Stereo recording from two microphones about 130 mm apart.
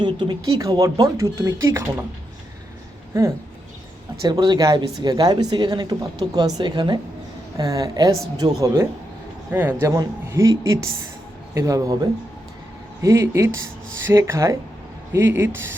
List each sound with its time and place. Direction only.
0.0 s speech: 35° right (ahead or behind)
4.3 s a man's voice: 35° right (ahead or behind)